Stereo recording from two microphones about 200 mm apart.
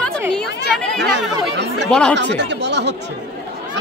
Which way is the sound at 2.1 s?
60° right (ahead or behind).